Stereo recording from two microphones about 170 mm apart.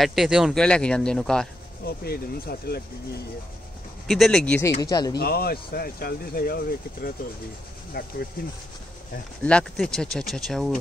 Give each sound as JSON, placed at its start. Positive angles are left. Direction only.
{"t": 0.0, "sound": "speech", "side_deg": 0}
{"t": 1.9, "sound": "speech", "side_deg": 60}
{"t": 4.1, "sound": "speech", "side_deg": 0}
{"t": 5.1, "sound": "speech", "side_deg": 65}
{"t": 9.4, "sound": "speech", "side_deg": 5}